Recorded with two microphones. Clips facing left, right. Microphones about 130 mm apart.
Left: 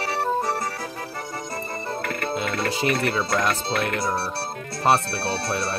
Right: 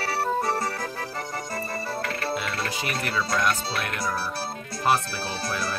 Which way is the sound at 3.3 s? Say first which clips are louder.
Left 2 dB; 30° left (ahead or behind).